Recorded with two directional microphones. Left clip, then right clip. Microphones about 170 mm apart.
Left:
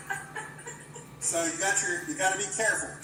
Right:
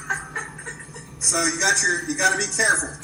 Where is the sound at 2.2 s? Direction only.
45° right (ahead or behind).